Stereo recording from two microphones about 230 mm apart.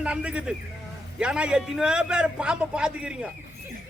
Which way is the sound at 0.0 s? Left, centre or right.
Centre.